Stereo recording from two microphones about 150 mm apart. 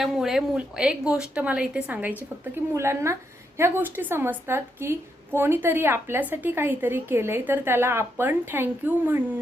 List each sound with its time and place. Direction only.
0.0 s a woman's voice: centre (ahead or behind)